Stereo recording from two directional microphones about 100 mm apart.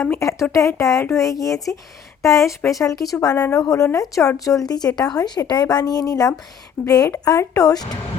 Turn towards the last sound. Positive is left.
turn(degrees=40)  # may be behind; listen again after turning